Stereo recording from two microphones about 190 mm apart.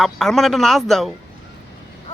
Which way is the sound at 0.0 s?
Centre (ahead or behind).